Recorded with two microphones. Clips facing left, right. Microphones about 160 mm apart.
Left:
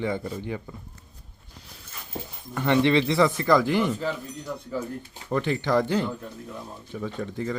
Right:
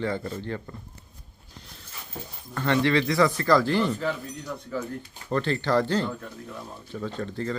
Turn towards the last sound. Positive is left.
turn(degrees=10)  # may be behind; listen again after turning